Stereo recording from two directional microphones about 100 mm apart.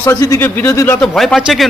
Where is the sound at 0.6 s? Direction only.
30° left (ahead or behind).